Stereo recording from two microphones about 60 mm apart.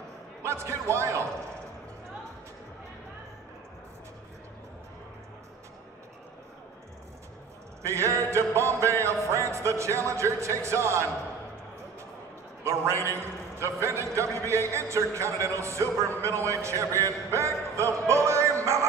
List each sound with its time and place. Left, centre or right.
0.4 s speech: right
7.8 s a man's voice: right
9.3 s music: right
12.6 s a man's voice: right